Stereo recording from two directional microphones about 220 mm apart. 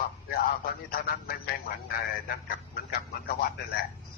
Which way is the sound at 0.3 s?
45° left (ahead or behind).